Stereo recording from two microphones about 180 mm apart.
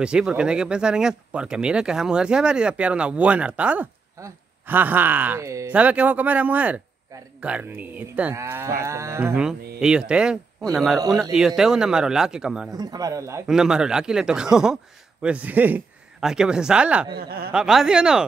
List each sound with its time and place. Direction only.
0.0 s speech: 5° right (ahead or behind)
12.7 s a man's voice: 20° right (ahead or behind)
13.5 s speech: 5° right (ahead or behind)
17.2 s speech: 60° right (ahead or behind)
17.5 s speech: 5° right (ahead or behind)